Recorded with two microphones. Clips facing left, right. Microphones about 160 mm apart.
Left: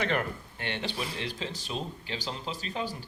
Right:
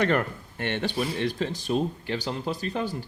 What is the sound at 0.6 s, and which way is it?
Speech, 50° right (ahead or behind).